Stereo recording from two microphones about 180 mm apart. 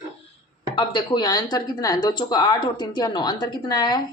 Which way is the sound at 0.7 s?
25° left (ahead or behind).